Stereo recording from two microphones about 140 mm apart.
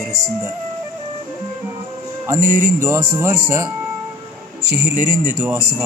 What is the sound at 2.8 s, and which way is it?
Speech, 15° right (ahead or behind).